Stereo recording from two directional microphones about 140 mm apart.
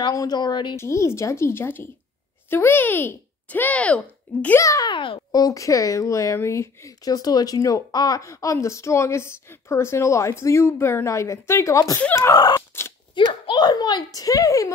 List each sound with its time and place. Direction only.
0.0 s a woman's voice: 25° left (ahead or behind)
0.7 s a child's voice: 20° left (ahead or behind)
4.9 s speech: 35° left (ahead or behind)
12.0 s a child's voice: 10° left (ahead or behind)
12.3 s speech: 30° left (ahead or behind)
13.1 s speech: 35° left (ahead or behind)